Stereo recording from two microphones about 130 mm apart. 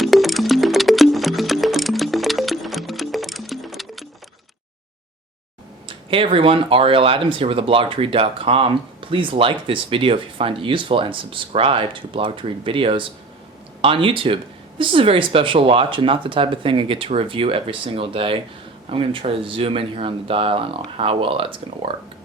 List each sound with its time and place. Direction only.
0.0 s music: centre (ahead or behind)
5.9 s speech: 40° right (ahead or behind)